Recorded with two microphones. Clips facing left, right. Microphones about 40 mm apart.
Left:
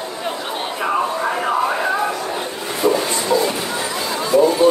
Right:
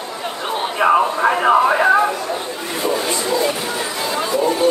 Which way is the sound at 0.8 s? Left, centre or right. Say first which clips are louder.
Right 6 dB; right.